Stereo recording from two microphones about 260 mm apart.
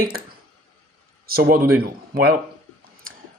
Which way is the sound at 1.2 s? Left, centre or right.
Right.